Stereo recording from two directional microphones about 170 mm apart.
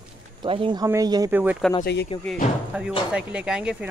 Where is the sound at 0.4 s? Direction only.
30° right (ahead or behind).